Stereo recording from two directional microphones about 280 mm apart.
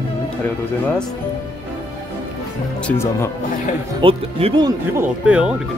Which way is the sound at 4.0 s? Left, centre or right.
Centre.